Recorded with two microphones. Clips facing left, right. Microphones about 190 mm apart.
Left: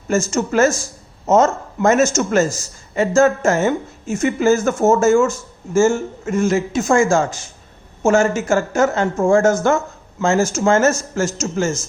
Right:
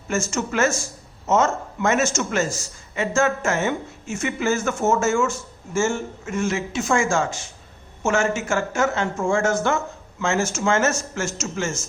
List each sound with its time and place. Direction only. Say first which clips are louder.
0.1 s a man's voice: left 6 dB; 40° left (ahead or behind)